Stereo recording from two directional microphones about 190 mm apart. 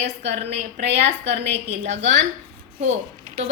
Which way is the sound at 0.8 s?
35° right (ahead or behind).